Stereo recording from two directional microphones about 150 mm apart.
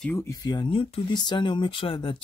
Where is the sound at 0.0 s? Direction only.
15° left (ahead or behind).